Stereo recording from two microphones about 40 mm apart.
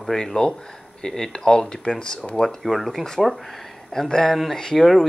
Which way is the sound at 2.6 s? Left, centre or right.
Centre.